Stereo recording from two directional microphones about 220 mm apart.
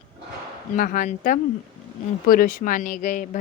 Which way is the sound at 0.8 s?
35° left (ahead or behind).